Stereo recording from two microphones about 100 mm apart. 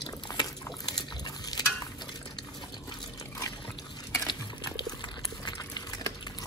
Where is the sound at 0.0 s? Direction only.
45° left (ahead or behind).